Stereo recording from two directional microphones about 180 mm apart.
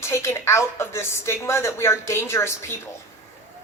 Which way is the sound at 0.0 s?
15° left (ahead or behind).